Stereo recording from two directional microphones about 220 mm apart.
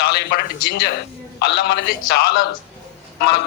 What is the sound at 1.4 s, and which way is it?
Speech, 45° left (ahead or behind).